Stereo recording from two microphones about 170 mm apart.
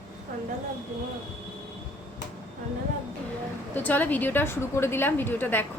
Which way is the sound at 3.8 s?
10° left (ahead or behind).